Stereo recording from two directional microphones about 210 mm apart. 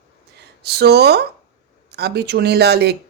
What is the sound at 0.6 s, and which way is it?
Speech, 50° right (ahead or behind).